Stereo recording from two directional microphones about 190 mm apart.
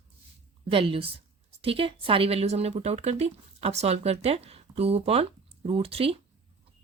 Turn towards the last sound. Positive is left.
turn(degrees=-30)  # may be behind; listen again after turning